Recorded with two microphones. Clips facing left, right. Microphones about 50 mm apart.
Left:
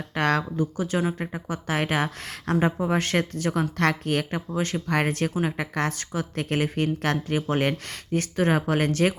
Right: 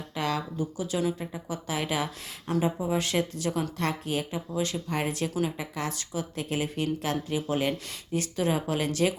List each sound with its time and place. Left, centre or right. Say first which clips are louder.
0.1 s a woman's voice: left 6 dB; left